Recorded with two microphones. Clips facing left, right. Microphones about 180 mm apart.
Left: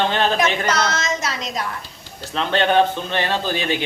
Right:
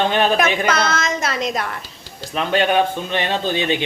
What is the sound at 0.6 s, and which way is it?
A woman's voice, 55° right (ahead or behind).